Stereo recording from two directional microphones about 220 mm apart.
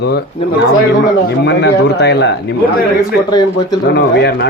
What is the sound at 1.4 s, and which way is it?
Speech, 50° left (ahead or behind).